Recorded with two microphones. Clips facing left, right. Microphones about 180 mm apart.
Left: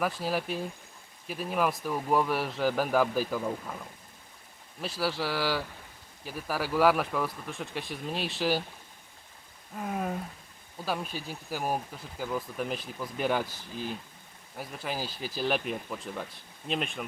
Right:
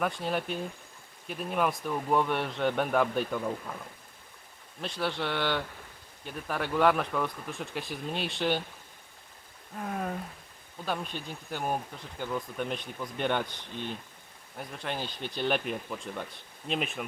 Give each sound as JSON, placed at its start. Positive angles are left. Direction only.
{"t": 0.0, "sound": "speech", "side_deg": 5}
{"t": 4.8, "sound": "speech", "side_deg": 5}
{"t": 9.7, "sound": "speech", "side_deg": 5}